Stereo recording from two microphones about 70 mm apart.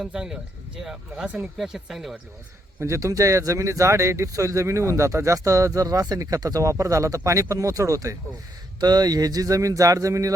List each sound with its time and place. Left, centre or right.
0.0 s speech: centre
2.8 s speech: right
8.8 s speech: right